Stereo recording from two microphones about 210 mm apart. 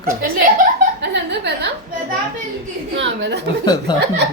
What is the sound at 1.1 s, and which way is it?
Speech, 50° right (ahead or behind).